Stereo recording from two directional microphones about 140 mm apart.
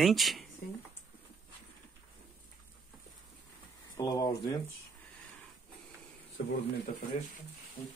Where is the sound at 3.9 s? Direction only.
25° left (ahead or behind).